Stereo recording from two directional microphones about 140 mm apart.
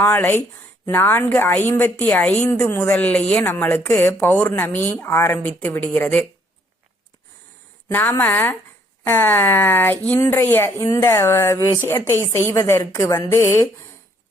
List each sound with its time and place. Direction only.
0.0 s a woman's voice: 15° left (ahead or behind)
7.9 s a woman's voice: 15° left (ahead or behind)